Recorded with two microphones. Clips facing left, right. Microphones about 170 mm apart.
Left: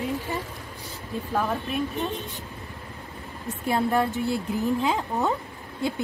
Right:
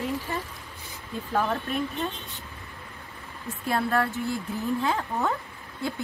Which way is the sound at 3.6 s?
15° left (ahead or behind).